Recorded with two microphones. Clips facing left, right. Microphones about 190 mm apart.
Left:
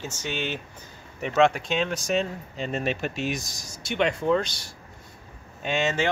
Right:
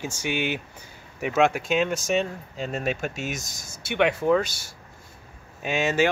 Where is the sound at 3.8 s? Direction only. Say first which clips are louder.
Right 2 dB; 60° right (ahead or behind).